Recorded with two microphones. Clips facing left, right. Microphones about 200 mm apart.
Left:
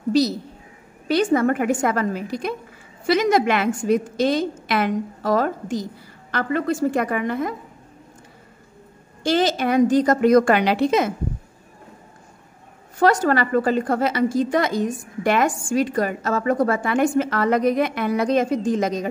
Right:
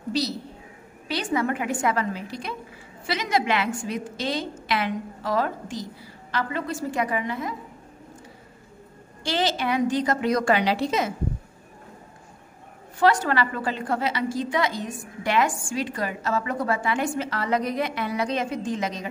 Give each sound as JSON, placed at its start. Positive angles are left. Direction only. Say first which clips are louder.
{"t": 1.0, "sound": "a woman's voice", "louder": "left 8 dB", "side_deg": 45}
{"t": 9.2, "sound": "a woman's voice", "louder": "left 6 dB", "side_deg": 45}
{"t": 13.0, "sound": "a woman's voice", "louder": "left 4 dB", "side_deg": 45}